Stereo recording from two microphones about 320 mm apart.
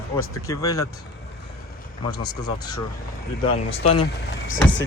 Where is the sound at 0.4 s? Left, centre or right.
Centre.